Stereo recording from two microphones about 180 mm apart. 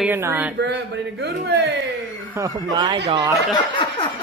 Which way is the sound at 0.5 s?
75° right (ahead or behind).